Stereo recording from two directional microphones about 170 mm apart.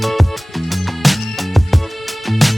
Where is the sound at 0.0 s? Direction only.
Centre (ahead or behind).